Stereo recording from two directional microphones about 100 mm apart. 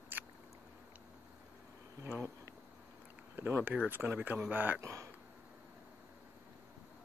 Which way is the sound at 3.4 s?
20° right (ahead or behind).